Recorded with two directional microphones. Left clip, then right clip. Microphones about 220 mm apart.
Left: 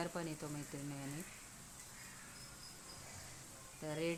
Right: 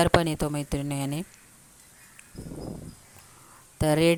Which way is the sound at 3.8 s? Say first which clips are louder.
Right 19 dB; 45° right (ahead or behind).